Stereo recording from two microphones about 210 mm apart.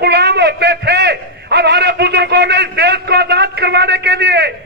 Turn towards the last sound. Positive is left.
turn(degrees=-55)  # may be behind; listen again after turning